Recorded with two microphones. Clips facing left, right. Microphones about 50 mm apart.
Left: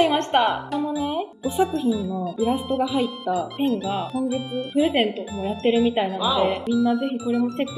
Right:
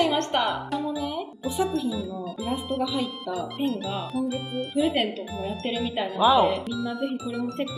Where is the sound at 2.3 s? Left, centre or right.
Centre.